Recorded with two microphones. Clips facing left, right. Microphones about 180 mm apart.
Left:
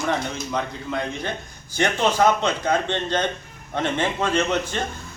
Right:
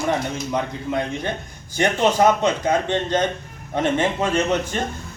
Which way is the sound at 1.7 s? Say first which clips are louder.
Right 2 dB; 15° right (ahead or behind).